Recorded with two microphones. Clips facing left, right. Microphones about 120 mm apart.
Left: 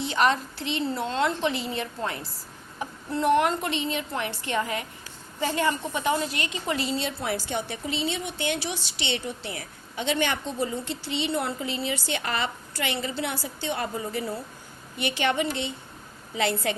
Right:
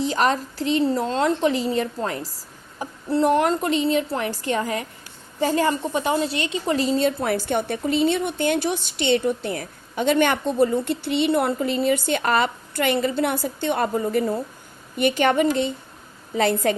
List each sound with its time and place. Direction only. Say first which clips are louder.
0.0 s a woman's voice: right 3 dB; 40° right (ahead or behind)